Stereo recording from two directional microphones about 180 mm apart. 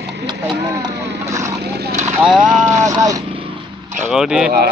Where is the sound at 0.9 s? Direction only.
70° right (ahead or behind).